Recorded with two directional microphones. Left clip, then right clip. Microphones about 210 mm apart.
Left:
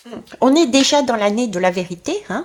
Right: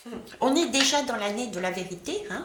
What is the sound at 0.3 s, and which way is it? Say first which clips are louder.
A woman's voice: left 10 dB; 45° left (ahead or behind).